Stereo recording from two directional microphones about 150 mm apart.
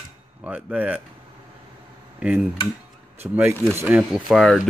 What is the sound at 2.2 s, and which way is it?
Speech, 10° right (ahead or behind).